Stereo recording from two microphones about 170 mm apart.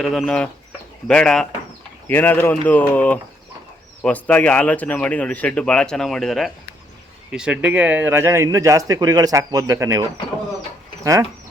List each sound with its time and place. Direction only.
0.0 s a man's voice: centre (ahead or behind); by 10.0 s 15° right (ahead or behind)
11.0 s speech: 20° right (ahead or behind)